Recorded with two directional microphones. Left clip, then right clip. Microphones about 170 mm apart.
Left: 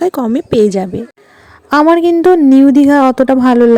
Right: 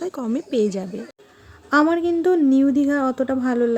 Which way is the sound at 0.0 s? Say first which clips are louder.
Left 12 dB; 45° left (ahead or behind).